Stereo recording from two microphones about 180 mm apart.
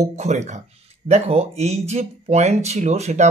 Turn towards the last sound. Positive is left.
turn(degrees=-35)  # may be behind; listen again after turning